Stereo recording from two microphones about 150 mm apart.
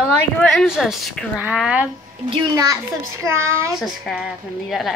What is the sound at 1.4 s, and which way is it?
Speech, 10° right (ahead or behind).